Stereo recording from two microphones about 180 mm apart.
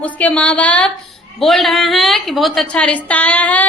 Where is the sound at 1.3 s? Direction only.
Centre (ahead or behind).